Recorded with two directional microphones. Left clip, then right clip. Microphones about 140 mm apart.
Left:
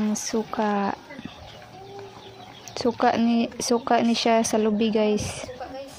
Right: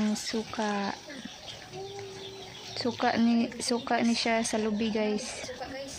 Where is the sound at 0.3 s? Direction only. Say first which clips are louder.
Left 10 dB; 20° left (ahead or behind).